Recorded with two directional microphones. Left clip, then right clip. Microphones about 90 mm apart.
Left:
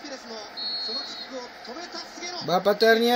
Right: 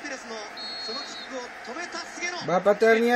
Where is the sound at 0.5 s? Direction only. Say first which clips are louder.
Left 6 dB; 35° right (ahead or behind).